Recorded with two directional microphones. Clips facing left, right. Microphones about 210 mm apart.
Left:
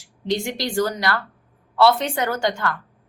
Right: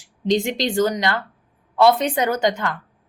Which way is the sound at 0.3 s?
20° right (ahead or behind).